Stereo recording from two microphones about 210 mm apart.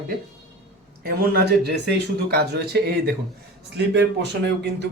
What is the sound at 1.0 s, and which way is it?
Speech, 45° right (ahead or behind).